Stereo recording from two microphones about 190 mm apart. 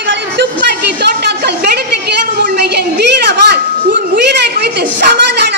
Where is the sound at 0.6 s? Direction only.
60° right (ahead or behind).